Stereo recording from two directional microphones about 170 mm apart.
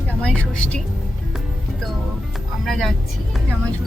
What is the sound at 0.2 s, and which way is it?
Speech, 5° left (ahead or behind).